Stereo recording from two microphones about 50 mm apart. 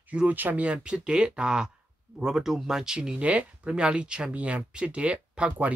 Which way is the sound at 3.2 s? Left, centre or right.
Right.